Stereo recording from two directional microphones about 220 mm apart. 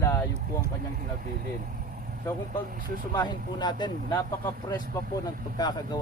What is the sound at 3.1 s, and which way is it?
Speech, 20° left (ahead or behind).